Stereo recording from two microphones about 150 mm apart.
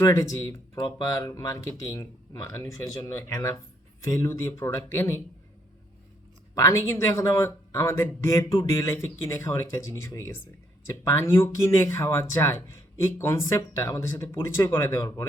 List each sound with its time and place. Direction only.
0.0 s speech: 20° left (ahead or behind)
6.5 s speech: 20° left (ahead or behind)